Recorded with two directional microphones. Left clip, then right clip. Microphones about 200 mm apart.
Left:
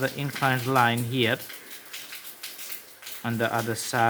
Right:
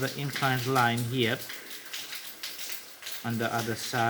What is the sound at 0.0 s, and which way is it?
Speech, 30° left (ahead or behind).